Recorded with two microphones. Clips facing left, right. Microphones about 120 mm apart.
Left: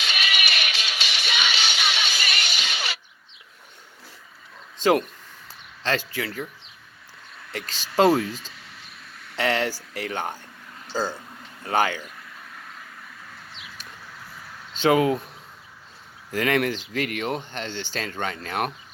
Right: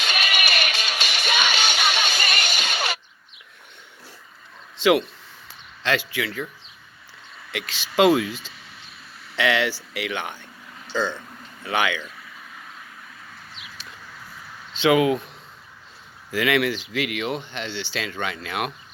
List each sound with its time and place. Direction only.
0.0 s music: 50° right (ahead or behind)
4.8 s speech: 45° left (ahead or behind)
7.5 s speech: 40° left (ahead or behind)
8.5 s a sound: centre (ahead or behind)
9.4 s speech: 40° left (ahead or behind)
12.0 s a sound: centre (ahead or behind)
14.7 s speech: 40° left (ahead or behind)
16.3 s speech: 45° left (ahead or behind)